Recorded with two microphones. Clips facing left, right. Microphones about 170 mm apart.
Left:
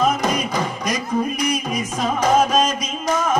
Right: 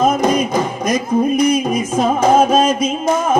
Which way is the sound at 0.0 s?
45° right (ahead or behind).